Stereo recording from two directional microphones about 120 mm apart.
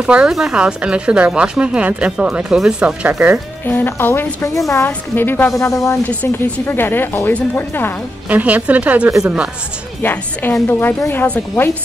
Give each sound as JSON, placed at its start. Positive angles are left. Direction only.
{"t": 0.0, "sound": "speech", "side_deg": -5}
{"t": 3.6, "sound": "speech", "side_deg": 15}
{"t": 6.0, "sound": "speech", "side_deg": 15}
{"t": 8.3, "sound": "speech", "side_deg": -15}
{"t": 10.0, "sound": "speech", "side_deg": 20}